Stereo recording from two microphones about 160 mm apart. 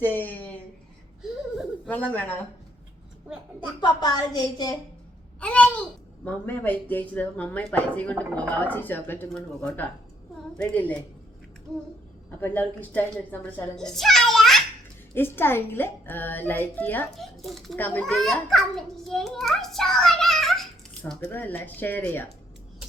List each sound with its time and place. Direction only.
0.0 s a sound: 10° left (ahead or behind)
1.9 s speech: 10° left (ahead or behind)
3.8 s a woman's voice: 25° left (ahead or behind)
5.4 s speech: 10° left (ahead or behind)
12.4 s a child's voice: 10° left (ahead or behind)
15.1 s a child's voice: 15° left (ahead or behind)